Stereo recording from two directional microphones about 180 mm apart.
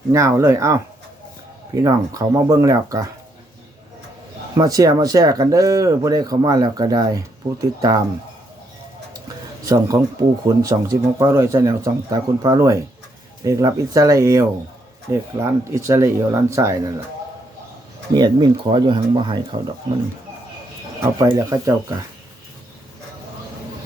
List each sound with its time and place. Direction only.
0.1 s speech: 15° right (ahead or behind)
4.5 s speech: 20° right (ahead or behind)
9.6 s speech: 20° right (ahead or behind)
18.1 s speech: 25° right (ahead or behind)
21.0 s speech: 15° right (ahead or behind)